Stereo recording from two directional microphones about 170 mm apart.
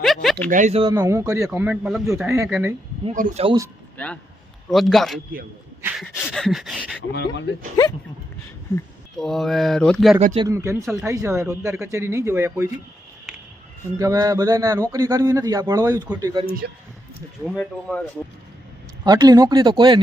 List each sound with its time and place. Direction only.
0.0 s speech: centre (ahead or behind)
0.5 s speech: 45° right (ahead or behind)
0.8 s a man's voice: 20° right (ahead or behind)
3.1 s speech: 45° right (ahead or behind)
3.9 s speech: 5° left (ahead or behind)
4.7 s a sound: centre (ahead or behind)
7.1 s speech: 85° left
9.1 s a sound: 5° left (ahead or behind)
10.3 s a man's voice: 20° right (ahead or behind)
14.0 s speech: 20° right (ahead or behind)
17.4 s a sound: centre (ahead or behind)
19.0 s speech: 25° right (ahead or behind)